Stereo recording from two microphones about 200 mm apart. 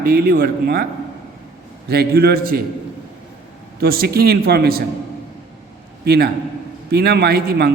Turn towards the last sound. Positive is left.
turn(degrees=-50)  # may be behind; listen again after turning